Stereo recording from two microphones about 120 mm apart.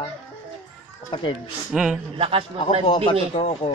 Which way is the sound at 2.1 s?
50° right (ahead or behind).